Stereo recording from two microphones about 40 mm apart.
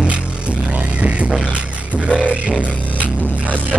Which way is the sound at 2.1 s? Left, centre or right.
Right.